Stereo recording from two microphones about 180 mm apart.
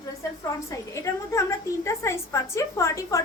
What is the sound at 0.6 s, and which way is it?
A woman's voice, 15° left (ahead or behind).